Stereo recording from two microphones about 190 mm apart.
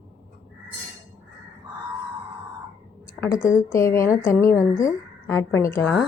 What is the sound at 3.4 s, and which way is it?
Speech, 5° right (ahead or behind).